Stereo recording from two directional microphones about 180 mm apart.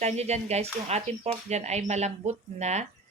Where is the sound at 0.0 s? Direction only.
35° right (ahead or behind).